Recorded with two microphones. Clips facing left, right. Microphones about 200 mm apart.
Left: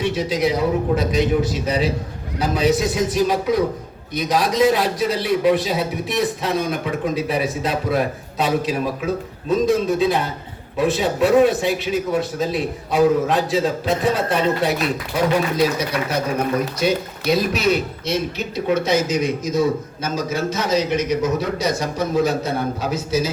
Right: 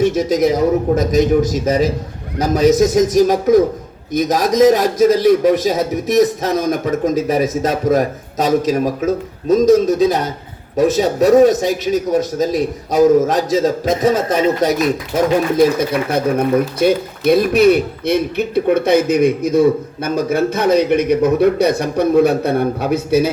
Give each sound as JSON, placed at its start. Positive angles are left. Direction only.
{"t": 0.0, "sound": "a man's voice", "side_deg": -45}